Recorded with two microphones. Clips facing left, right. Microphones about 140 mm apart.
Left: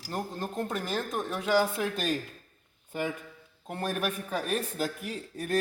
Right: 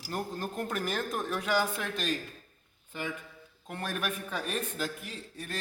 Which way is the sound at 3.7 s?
35° left (ahead or behind).